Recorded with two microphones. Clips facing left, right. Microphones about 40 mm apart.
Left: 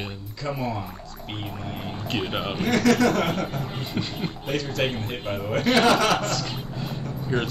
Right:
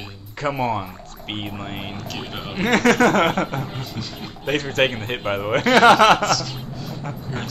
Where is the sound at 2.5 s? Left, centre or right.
Right.